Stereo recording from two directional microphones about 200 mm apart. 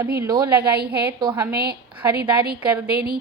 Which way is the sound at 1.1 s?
20° right (ahead or behind).